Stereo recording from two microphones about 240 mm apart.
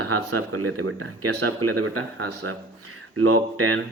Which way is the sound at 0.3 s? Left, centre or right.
Right.